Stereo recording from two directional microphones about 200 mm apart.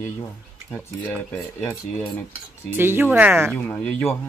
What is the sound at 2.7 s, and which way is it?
Speech, 10° right (ahead or behind).